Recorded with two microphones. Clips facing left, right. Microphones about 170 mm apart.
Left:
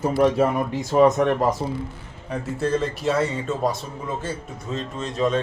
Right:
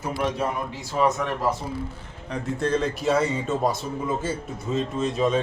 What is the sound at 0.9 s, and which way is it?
Speech, 50° left (ahead or behind).